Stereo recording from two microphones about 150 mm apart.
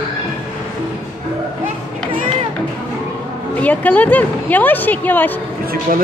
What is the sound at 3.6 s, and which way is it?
Speech, 10° left (ahead or behind).